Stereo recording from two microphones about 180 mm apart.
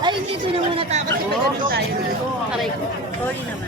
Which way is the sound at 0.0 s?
30° right (ahead or behind).